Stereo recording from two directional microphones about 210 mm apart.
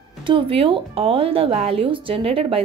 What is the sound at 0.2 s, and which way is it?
Speech, 25° right (ahead or behind).